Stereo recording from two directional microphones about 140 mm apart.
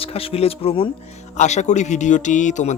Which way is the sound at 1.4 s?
55° left (ahead or behind).